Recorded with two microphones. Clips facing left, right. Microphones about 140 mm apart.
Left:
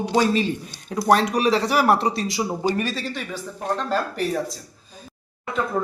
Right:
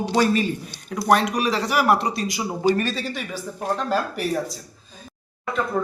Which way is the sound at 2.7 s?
10° left (ahead or behind).